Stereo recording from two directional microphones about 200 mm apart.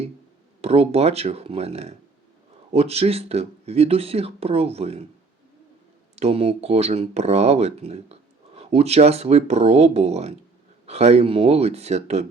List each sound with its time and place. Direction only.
0.6 s speech: 30° right (ahead or behind)
6.1 s speech: 30° right (ahead or behind)